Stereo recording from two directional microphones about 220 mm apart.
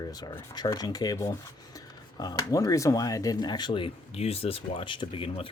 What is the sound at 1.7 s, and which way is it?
Speech, 15° left (ahead or behind).